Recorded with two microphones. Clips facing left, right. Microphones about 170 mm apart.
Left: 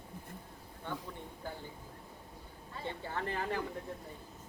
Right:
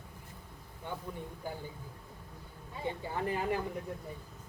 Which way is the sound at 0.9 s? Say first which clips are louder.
Right 2 dB; 15° right (ahead or behind).